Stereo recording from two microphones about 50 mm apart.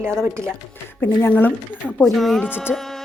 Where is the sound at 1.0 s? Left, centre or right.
Left.